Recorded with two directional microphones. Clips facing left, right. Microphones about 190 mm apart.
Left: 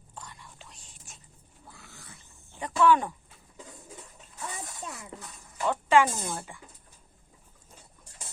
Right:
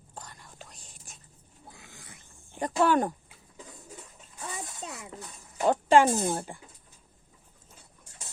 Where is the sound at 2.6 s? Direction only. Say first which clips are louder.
Left 1 dB; 45° right (ahead or behind).